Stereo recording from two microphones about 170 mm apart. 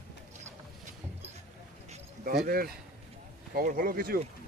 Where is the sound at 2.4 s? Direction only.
60° right (ahead or behind).